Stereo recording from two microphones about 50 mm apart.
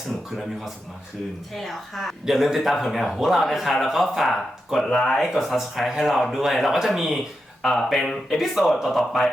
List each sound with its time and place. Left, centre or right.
1.6 s a man's voice: centre
2.2 s a man's voice: centre